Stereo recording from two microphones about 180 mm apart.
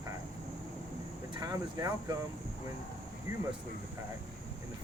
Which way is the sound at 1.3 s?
20° right (ahead or behind).